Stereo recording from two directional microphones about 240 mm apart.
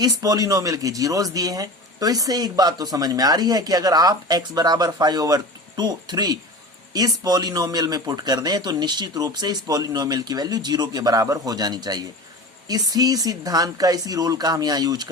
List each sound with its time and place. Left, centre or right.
0.0 s speech: centre